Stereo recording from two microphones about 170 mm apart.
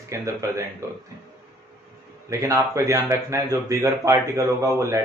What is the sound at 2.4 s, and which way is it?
Speech, 20° right (ahead or behind).